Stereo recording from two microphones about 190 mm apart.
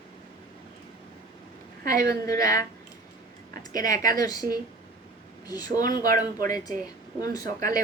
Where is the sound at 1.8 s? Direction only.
50° right (ahead or behind).